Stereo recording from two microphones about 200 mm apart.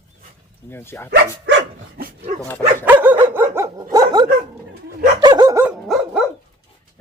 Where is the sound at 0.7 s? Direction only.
10° left (ahead or behind).